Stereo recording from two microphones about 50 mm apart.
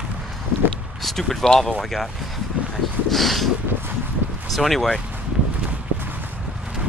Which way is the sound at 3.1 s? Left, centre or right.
Centre.